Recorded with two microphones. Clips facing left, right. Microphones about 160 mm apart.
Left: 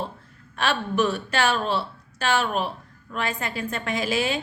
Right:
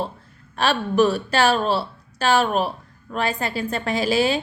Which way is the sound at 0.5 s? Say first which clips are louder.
Right 4 dB; 35° right (ahead or behind).